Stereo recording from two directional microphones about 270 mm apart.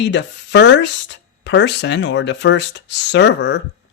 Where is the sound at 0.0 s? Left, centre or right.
Left.